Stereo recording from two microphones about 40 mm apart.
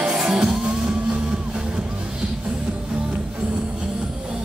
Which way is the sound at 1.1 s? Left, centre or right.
Centre.